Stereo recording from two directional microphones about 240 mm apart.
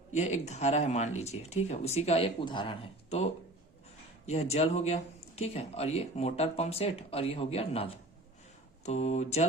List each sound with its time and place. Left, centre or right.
0.1 s speech: left
4.3 s speech: left